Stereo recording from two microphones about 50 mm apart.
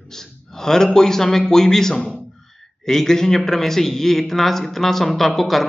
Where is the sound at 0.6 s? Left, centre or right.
Centre.